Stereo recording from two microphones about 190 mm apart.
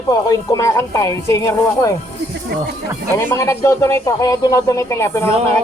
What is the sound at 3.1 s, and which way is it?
Speech, 15° left (ahead or behind).